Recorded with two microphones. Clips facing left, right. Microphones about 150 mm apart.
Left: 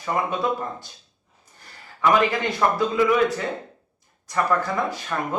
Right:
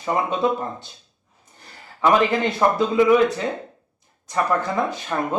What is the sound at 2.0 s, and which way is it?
Speech, 25° right (ahead or behind).